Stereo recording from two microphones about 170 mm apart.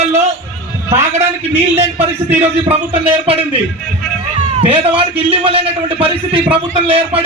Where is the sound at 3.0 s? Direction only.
35° right (ahead or behind).